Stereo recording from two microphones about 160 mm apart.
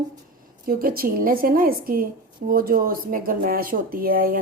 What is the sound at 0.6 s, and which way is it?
Speech, 65° right (ahead or behind).